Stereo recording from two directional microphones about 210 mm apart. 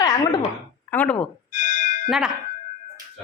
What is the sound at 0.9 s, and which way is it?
Speech, 10° left (ahead or behind).